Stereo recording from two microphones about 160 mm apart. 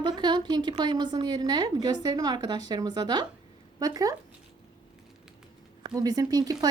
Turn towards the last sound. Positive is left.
turn(degrees=-25)  # may be behind; listen again after turning